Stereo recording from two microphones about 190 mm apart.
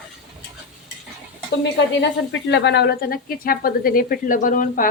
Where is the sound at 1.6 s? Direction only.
70° left (ahead or behind).